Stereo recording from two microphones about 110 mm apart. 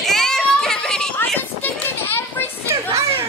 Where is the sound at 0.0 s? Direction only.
5° left (ahead or behind).